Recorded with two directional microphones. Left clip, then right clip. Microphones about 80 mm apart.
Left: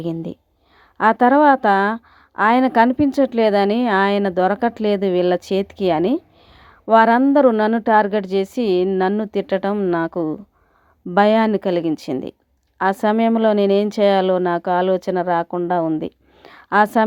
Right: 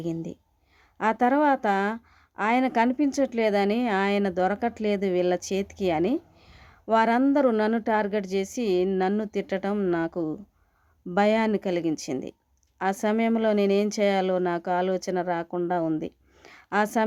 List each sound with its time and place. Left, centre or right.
0.1 s speech: left
0.9 s a woman's voice: left
7.5 s a woman's voice: left
16.4 s a sound: left